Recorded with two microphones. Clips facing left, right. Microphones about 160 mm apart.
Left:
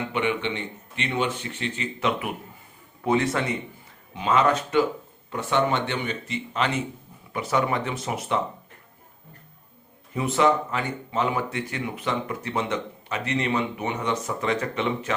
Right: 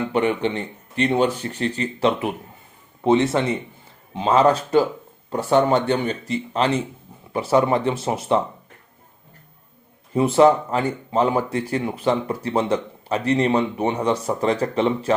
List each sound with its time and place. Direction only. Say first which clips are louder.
0.1 s speech: right 5 dB; 40° right (ahead or behind)
10.2 s speech: right 7 dB; 30° right (ahead or behind)